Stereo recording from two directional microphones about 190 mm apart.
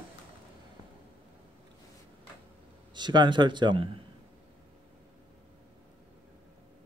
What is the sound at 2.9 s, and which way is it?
Speech, 25° right (ahead or behind).